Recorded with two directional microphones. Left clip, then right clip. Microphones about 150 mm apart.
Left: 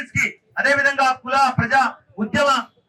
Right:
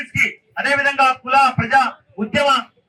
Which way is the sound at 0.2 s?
25° right (ahead or behind).